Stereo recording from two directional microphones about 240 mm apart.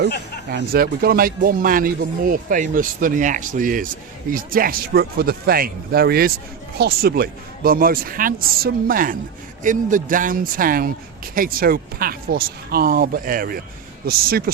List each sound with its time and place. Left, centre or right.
0.5 s speech: right